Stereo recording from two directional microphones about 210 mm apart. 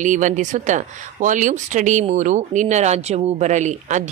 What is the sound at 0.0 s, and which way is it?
Speech, 35° right (ahead or behind).